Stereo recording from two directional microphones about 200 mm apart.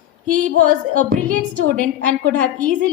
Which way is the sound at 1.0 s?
40° right (ahead or behind).